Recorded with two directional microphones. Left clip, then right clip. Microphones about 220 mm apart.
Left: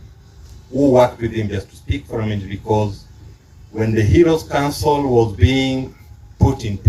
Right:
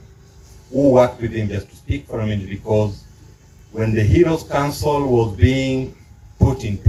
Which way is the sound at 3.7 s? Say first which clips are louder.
Left 2 dB; 55° left (ahead or behind).